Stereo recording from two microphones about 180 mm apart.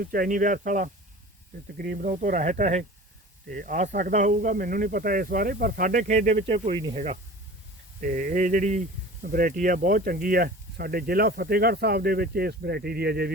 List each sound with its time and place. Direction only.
0.0 s speech: 50° right (ahead or behind)